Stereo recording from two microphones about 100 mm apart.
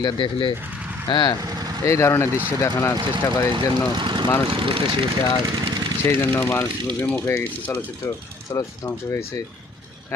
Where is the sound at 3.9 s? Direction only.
55° right (ahead or behind).